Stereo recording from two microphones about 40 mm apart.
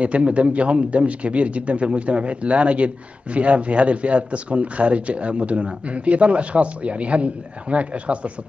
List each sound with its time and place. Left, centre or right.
0.0 s a man's voice: right